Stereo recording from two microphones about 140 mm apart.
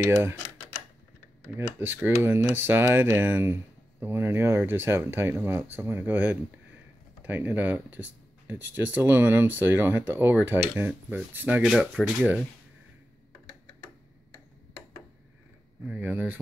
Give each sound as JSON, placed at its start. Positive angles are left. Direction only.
{"t": 0.0, "sound": "speech", "side_deg": -15}
{"t": 1.8, "sound": "speech", "side_deg": -15}
{"t": 15.9, "sound": "speech", "side_deg": -15}